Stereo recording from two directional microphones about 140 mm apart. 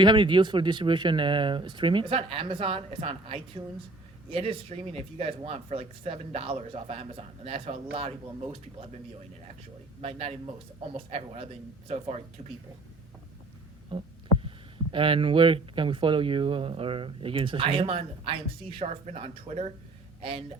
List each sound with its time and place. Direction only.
0.0 s speech: 35° right (ahead or behind)
10.0 s speech: 45° right (ahead or behind)
13.9 s speech: 35° right (ahead or behind)